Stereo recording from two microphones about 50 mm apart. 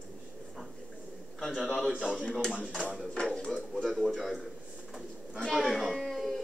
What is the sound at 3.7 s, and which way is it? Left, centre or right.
Speech, centre.